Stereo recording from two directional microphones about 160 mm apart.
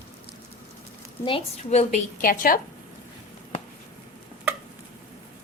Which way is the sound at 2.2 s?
60° left (ahead or behind).